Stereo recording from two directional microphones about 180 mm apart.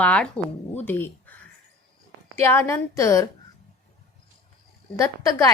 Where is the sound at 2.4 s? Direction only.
15° left (ahead or behind).